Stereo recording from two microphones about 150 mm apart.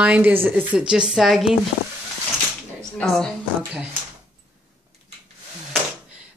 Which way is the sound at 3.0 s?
5° left (ahead or behind).